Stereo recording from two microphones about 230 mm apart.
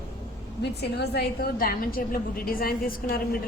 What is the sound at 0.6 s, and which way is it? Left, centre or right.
A woman's voice, left.